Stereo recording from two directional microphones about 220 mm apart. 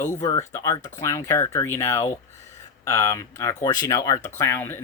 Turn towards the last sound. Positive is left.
turn(degrees=10)  # may be behind; listen again after turning